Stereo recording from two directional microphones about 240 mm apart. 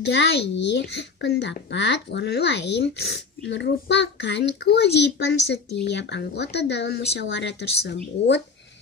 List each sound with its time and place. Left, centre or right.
0.0 s a child's voice: left